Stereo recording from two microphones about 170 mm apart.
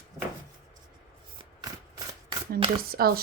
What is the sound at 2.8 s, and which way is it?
Speech, 60° right (ahead or behind).